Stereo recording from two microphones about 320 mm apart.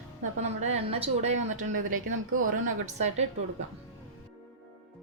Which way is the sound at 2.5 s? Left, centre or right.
Right.